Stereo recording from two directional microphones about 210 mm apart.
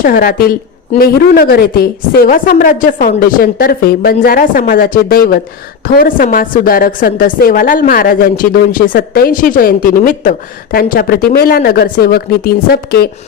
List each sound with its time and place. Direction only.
0.0 s a woman's voice: 45° left (ahead or behind)